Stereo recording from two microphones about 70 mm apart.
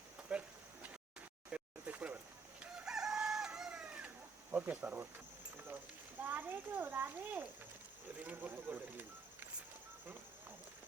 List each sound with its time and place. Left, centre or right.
0.2 s a sound: centre
2.8 s chicken: centre
4.5 s a child's voice: right